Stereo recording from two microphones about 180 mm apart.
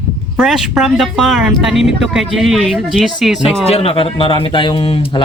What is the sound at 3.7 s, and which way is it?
Speech, 35° left (ahead or behind).